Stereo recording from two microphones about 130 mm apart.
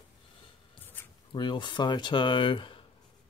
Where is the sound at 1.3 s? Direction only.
35° left (ahead or behind).